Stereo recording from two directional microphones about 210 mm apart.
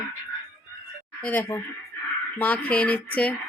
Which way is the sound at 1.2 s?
10° left (ahead or behind).